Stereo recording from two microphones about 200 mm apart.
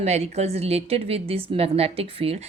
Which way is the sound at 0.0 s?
35° right (ahead or behind).